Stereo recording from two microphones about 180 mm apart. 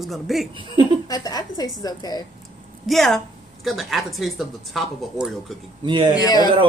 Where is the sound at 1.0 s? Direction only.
20° left (ahead or behind).